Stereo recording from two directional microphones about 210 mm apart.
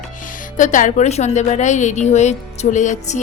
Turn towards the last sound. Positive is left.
turn(degrees=35)  # may be behind; listen again after turning